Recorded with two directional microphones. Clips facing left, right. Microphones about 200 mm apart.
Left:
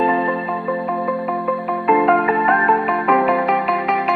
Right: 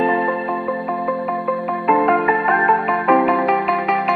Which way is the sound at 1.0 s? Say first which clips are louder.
Even; centre (ahead or behind).